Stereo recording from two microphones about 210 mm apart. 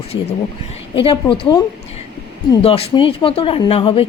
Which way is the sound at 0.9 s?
25° left (ahead or behind).